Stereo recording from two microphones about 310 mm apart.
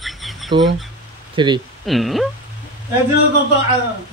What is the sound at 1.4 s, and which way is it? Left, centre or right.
Speech, centre.